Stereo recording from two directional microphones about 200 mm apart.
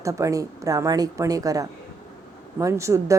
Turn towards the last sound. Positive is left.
turn(degrees=-15)  # may be behind; listen again after turning